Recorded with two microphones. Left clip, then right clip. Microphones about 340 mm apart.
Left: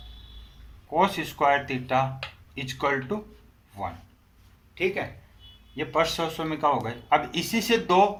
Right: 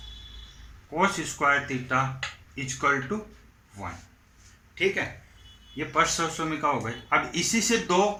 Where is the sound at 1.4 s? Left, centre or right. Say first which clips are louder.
Left 1 dB; left.